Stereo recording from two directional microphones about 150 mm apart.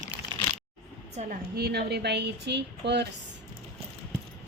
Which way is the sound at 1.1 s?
50° right (ahead or behind).